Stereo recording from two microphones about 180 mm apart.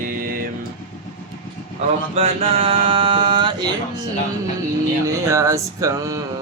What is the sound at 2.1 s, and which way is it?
Speech, 35° right (ahead or behind).